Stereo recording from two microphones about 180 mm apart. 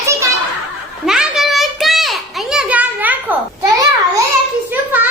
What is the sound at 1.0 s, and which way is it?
Children playing, 5° right (ahead or behind).